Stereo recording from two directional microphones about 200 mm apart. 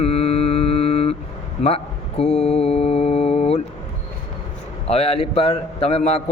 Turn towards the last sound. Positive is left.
turn(degrees=30)  # may be behind; listen again after turning